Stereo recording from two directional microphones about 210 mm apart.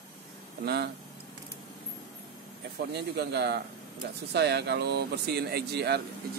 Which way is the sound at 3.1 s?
50° right (ahead or behind).